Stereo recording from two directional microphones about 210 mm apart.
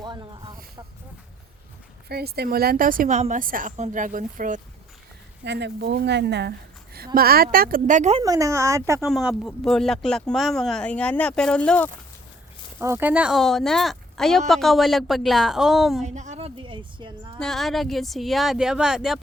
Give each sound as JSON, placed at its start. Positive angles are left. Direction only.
{"t": 0.0, "sound": "a sound", "side_deg": -20}
{"t": 2.0, "sound": "a woman's voice", "side_deg": -50}
{"t": 5.5, "sound": "speech", "side_deg": -55}
{"t": 8.2, "sound": "speech", "side_deg": -15}
{"t": 9.0, "sound": "speech", "side_deg": 0}
{"t": 12.8, "sound": "speech", "side_deg": -10}
{"t": 16.0, "sound": "a woman's voice", "side_deg": -35}
{"t": 17.4, "sound": "speech", "side_deg": 0}